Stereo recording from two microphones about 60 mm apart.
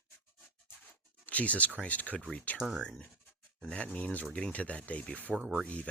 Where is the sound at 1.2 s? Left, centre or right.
Left.